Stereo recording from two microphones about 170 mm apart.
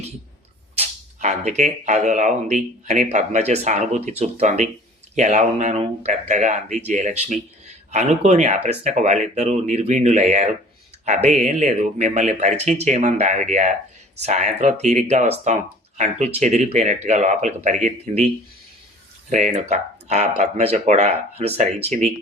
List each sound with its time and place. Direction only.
0.8 s speech: 45° right (ahead or behind)
19.3 s speech: 45° right (ahead or behind)